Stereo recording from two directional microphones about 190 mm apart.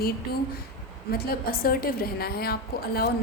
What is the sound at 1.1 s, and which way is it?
A woman's voice, 50° left (ahead or behind).